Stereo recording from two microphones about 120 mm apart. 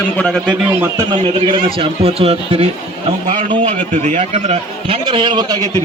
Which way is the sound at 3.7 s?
75° right (ahead or behind).